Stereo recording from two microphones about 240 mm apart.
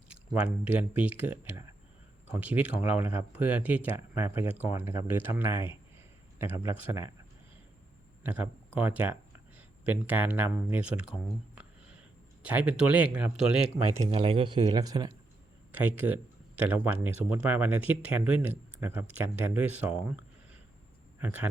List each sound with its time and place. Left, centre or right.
0.1 s speech: centre
8.2 s speech: centre
14.0 s speech: right; by 21.4 s centre